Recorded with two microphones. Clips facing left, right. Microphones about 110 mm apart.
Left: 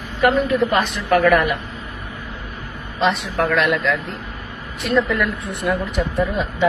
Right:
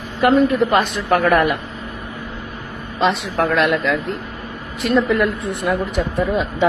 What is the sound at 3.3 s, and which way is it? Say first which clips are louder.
A woman's voice: right 1 dB; 50° right (ahead or behind).